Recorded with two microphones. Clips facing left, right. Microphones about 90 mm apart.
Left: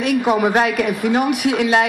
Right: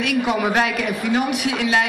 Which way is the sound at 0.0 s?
45° left (ahead or behind).